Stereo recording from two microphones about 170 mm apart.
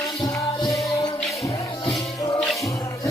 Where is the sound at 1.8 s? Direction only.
30° left (ahead or behind).